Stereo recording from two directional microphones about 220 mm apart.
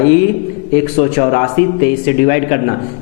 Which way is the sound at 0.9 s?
20° left (ahead or behind).